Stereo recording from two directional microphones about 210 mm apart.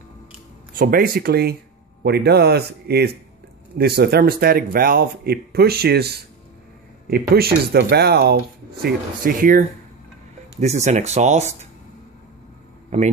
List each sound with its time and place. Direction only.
0.7 s speech: 45° right (ahead or behind)
12.9 s speech: 30° right (ahead or behind)